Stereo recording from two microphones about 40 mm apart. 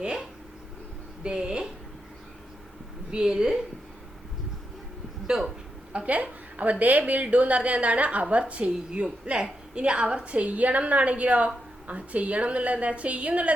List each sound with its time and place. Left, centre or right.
0.0 s speech: right
3.1 s a woman's voice: centre
5.3 s speech: centre
5.9 s a woman's voice: right
10.3 s a woman's voice: right